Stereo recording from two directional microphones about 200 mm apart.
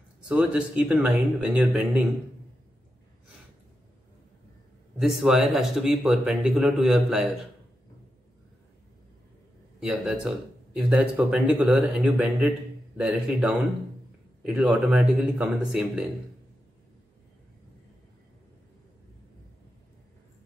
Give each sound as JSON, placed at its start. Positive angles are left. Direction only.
{"t": 0.3, "sound": "speech", "side_deg": -5}
{"t": 4.9, "sound": "speech", "side_deg": 0}
{"t": 9.8, "sound": "speech", "side_deg": -5}